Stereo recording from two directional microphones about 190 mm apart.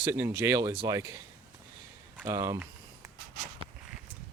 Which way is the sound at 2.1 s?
15° right (ahead or behind).